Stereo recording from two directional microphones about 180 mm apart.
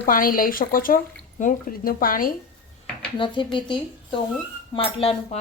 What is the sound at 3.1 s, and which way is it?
Speech, 25° left (ahead or behind).